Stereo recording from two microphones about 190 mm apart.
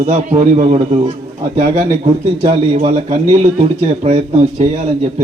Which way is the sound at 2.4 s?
40° right (ahead or behind).